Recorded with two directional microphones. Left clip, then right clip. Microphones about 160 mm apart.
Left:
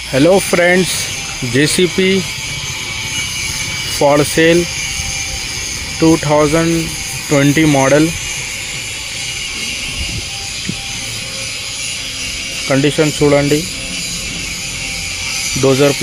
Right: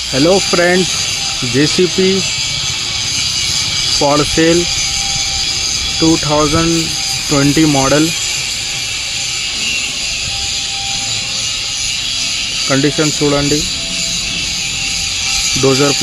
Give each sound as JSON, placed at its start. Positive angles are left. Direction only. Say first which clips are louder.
{"t": 0.1, "sound": "speech", "louder": "left 1 dB", "side_deg": 15}
{"t": 4.1, "sound": "speech", "louder": "left 3 dB", "side_deg": 15}
{"t": 6.0, "sound": "speech", "louder": "left 2 dB", "side_deg": 0}
{"t": 7.3, "sound": "speech", "louder": "left 1 dB", "side_deg": 15}
{"t": 12.7, "sound": "speech", "louder": "left 2 dB", "side_deg": 10}
{"t": 15.6, "sound": "speech", "louder": "left 2 dB", "side_deg": 5}